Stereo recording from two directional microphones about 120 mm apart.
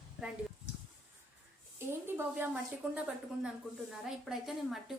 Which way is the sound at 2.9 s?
5° right (ahead or behind).